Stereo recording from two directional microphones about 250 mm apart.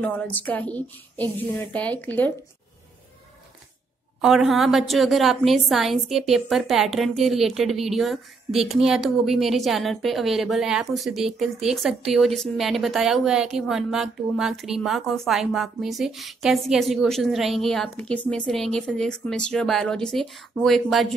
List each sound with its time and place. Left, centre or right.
0.0 s a woman's voice: centre
4.2 s a woman's voice: centre